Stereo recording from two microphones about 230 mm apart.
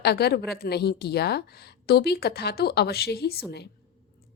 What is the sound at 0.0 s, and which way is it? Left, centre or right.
A woman's voice, left.